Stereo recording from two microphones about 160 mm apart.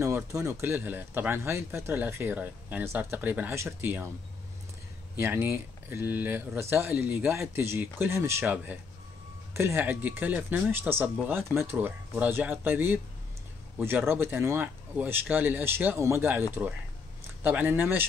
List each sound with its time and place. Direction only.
0.0 s speech: 20° right (ahead or behind)
5.1 s speech: 15° right (ahead or behind)